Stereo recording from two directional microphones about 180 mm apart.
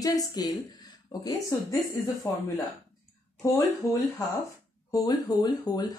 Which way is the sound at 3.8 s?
15° left (ahead or behind).